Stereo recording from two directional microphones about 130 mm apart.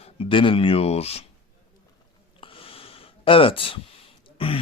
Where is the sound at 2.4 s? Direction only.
45° left (ahead or behind).